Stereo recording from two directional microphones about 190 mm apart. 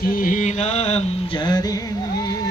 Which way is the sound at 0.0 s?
50° left (ahead or behind).